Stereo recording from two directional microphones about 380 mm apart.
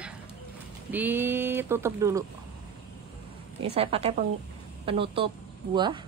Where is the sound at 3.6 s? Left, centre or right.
Centre.